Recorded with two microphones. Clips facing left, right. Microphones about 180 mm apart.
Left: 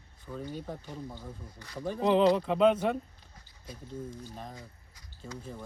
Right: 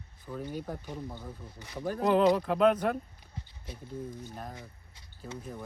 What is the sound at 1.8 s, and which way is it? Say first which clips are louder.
Speech: even; centre (ahead or behind).